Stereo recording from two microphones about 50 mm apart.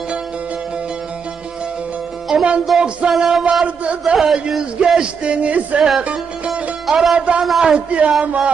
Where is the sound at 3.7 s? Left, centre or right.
Right.